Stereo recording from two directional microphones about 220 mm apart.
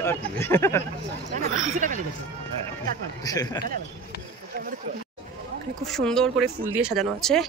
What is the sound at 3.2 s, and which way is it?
Speech, 15° left (ahead or behind).